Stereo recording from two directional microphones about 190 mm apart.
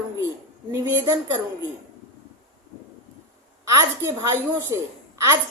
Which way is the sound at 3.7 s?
15° right (ahead or behind).